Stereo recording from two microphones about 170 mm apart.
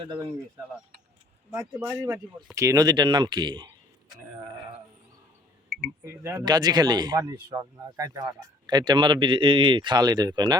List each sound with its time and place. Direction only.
0.1 s speech: 20° right (ahead or behind)
2.6 s speech: 25° right (ahead or behind)
6.1 s speech: 15° right (ahead or behind)